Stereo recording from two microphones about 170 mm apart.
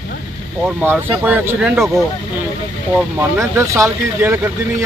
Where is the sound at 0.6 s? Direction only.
10° right (ahead or behind).